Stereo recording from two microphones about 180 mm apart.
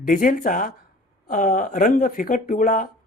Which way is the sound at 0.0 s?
50° left (ahead or behind).